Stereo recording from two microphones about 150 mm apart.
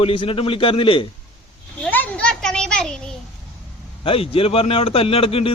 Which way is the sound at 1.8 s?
10° left (ahead or behind).